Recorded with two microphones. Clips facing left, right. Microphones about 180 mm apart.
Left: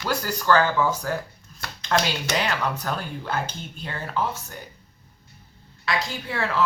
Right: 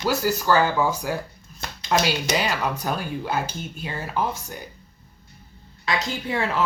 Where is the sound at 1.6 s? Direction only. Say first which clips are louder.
Right 1 dB; 20° right (ahead or behind).